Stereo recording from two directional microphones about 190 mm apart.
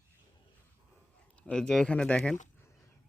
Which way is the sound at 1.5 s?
5° left (ahead or behind).